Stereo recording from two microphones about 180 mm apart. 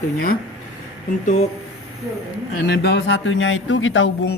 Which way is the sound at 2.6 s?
65° left (ahead or behind).